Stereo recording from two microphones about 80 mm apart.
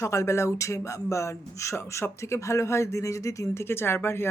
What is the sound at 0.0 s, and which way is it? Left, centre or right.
A woman's voice, left.